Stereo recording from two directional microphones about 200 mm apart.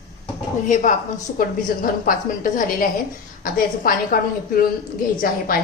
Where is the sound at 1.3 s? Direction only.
45° left (ahead or behind).